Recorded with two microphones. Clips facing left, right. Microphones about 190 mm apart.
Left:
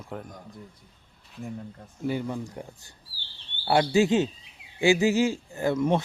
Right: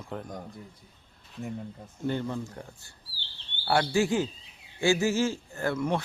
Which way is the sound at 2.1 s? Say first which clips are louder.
Left 1 dB; 10° left (ahead or behind).